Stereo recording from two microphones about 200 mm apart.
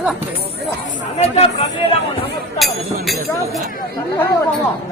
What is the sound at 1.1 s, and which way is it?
Speech, 30° left (ahead or behind).